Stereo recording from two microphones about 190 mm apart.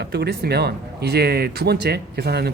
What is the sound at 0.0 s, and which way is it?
Speech, 60° right (ahead or behind).